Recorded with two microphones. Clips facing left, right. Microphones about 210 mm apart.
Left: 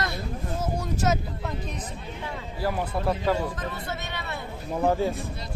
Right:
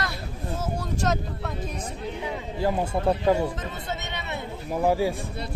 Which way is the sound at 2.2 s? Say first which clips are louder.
Right 3 dB; 20° right (ahead or behind).